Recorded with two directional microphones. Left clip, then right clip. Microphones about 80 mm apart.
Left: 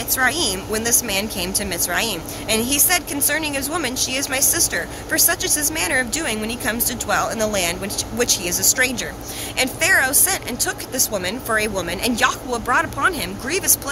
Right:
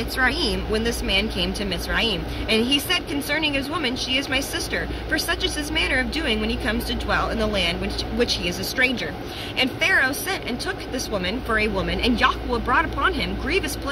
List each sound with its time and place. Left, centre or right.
0.2 s a woman's voice: left